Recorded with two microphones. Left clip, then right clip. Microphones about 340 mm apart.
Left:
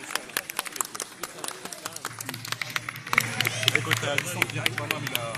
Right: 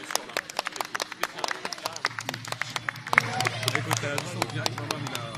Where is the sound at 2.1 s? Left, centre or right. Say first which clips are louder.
Right 1 dB; centre.